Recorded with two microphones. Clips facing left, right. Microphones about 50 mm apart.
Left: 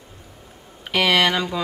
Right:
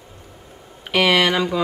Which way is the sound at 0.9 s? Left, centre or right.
Centre.